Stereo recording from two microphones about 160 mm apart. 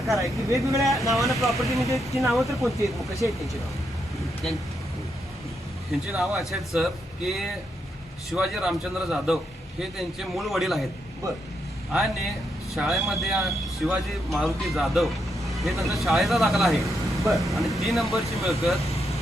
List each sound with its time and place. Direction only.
0.5 s speech: 20° right (ahead or behind)
0.9 s speech: centre (ahead or behind)
5.9 s speech: centre (ahead or behind)
11.9 s speech: centre (ahead or behind)
16.8 s vehicle: 20° right (ahead or behind)
17.3 s speech: centre (ahead or behind)
18.9 s vehicle: 40° left (ahead or behind)